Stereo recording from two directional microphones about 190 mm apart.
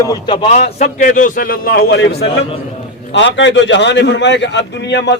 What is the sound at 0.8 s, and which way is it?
A man's voice, 45° left (ahead or behind).